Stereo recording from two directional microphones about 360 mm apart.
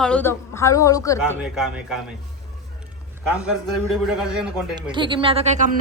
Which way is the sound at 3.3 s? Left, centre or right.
Centre.